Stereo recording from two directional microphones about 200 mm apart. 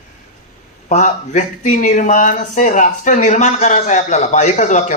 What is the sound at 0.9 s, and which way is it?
Speech, 35° left (ahead or behind).